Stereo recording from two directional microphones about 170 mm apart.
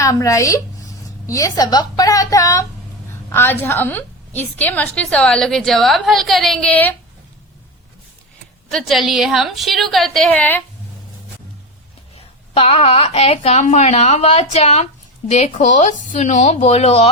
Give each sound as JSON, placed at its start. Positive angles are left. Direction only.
{"t": 0.0, "sound": "a woman's voice", "side_deg": 20}
{"t": 8.7, "sound": "a woman's voice", "side_deg": 0}
{"t": 12.1, "sound": "a woman's voice", "side_deg": 35}